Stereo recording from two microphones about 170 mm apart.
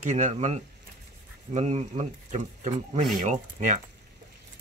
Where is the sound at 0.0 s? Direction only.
45° right (ahead or behind).